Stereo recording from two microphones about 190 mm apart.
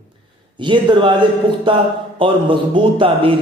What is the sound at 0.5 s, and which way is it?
A man's voice, 25° right (ahead or behind).